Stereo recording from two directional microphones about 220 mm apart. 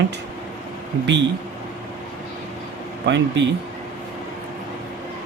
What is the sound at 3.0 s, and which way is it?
Speech, 55° right (ahead or behind).